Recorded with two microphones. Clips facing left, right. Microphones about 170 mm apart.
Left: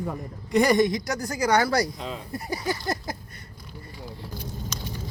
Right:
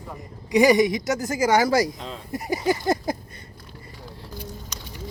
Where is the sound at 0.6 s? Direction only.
15° right (ahead or behind).